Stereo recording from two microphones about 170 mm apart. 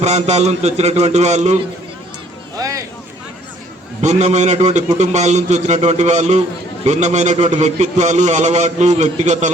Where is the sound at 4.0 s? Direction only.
45° right (ahead or behind).